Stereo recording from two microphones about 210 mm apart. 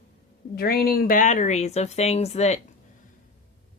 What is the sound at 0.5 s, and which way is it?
Speech, 45° left (ahead or behind).